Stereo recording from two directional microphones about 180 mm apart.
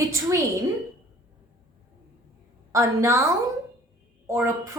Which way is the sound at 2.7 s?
15° right (ahead or behind).